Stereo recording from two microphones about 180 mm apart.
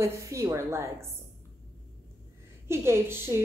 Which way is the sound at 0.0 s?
15° right (ahead or behind).